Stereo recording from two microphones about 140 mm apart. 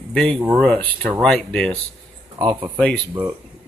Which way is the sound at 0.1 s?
5° left (ahead or behind).